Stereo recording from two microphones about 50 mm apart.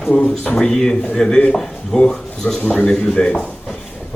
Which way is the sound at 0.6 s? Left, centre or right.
Centre.